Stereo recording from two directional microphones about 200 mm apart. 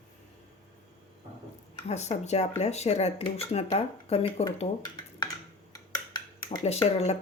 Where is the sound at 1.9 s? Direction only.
35° left (ahead or behind).